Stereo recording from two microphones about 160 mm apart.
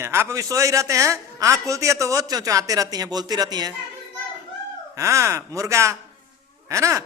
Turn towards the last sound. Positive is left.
turn(degrees=-20)  # may be behind; listen again after turning